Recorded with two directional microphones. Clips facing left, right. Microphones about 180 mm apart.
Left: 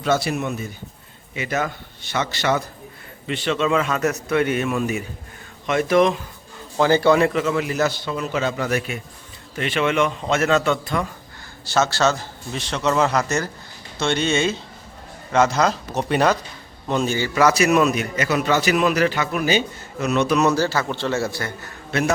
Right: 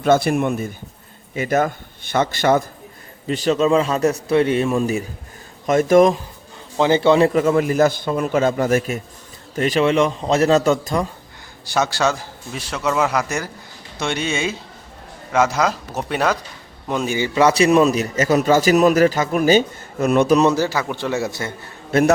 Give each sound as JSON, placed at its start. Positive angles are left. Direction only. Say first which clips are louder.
{"t": 0.0, "sound": "a man's voice", "louder": "right 5 dB", "side_deg": -50}
{"t": 6.7, "sound": "a man's voice", "louder": "right 2 dB", "side_deg": -20}
{"t": 7.3, "sound": "a man's voice", "louder": "right 5 dB", "side_deg": -45}
{"t": 11.6, "sound": "a man's voice", "louder": "even", "side_deg": -15}
{"t": 17.2, "sound": "a man's voice", "louder": "right 4 dB", "side_deg": -20}
{"t": 20.3, "sound": "a man's voice", "louder": "right 3 dB", "side_deg": -30}
{"t": 20.6, "sound": "a man's voice", "louder": "right 1 dB", "side_deg": -15}